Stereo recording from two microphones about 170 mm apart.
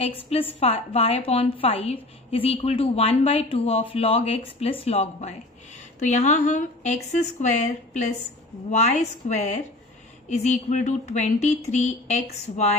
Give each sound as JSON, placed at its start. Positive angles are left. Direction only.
{"t": 0.0, "sound": "a woman's voice", "side_deg": 35}